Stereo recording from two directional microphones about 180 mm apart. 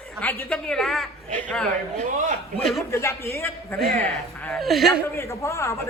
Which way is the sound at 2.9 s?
15° left (ahead or behind).